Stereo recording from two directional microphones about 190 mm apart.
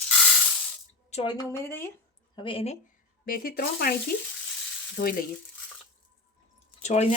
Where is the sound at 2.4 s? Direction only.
30° left (ahead or behind).